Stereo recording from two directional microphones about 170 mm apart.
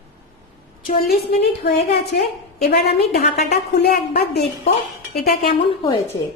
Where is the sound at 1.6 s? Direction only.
75° left (ahead or behind).